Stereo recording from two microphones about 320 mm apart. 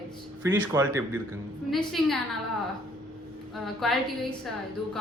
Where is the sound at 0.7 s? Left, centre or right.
Centre.